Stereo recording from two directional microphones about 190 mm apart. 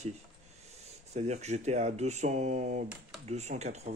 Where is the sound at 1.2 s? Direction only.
35° right (ahead or behind).